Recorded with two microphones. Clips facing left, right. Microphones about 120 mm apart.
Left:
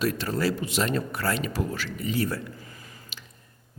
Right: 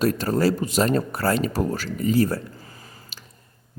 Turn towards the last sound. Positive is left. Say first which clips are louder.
# right 1 dB
turn(degrees=-40)  # may be behind; listen again after turning